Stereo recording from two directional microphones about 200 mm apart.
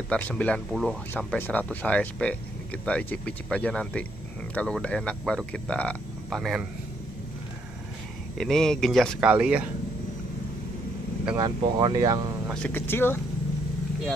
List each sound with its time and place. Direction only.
0.1 s speech: 5° left (ahead or behind)
8.4 s speech: 5° left (ahead or behind)
11.3 s speech: 20° right (ahead or behind)
12.6 s speech: 10° left (ahead or behind)